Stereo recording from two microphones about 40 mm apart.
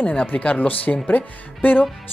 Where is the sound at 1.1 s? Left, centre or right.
Left.